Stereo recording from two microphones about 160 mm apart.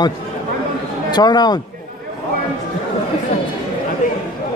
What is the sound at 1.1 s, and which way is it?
Speech, 25° left (ahead or behind).